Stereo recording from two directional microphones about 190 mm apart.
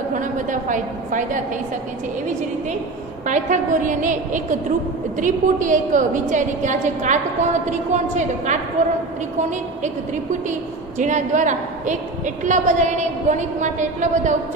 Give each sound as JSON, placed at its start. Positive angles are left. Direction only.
{"t": 0.1, "sound": "a woman's voice", "side_deg": -40}
{"t": 3.3, "sound": "a woman's voice", "side_deg": -40}
{"t": 11.0, "sound": "a woman's voice", "side_deg": -40}